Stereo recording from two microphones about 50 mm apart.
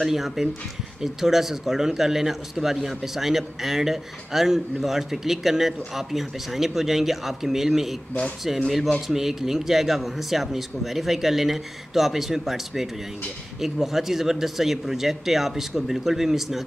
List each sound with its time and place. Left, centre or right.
0.0 s a man's voice: centre